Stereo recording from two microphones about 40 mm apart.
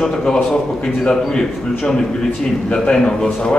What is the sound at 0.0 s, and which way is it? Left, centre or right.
A man's voice, centre.